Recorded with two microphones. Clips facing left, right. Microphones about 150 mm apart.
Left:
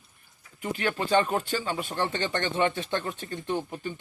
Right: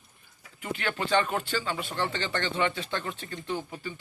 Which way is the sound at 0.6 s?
40° left (ahead or behind).